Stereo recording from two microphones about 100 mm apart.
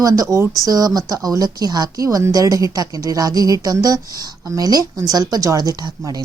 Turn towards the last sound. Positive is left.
turn(degrees=-40)  # may be behind; listen again after turning